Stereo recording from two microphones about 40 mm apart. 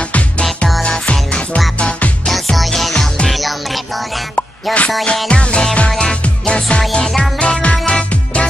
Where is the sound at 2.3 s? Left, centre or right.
Centre.